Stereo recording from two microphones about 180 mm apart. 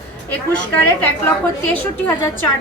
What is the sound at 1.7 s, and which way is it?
Speech, 10° left (ahead or behind).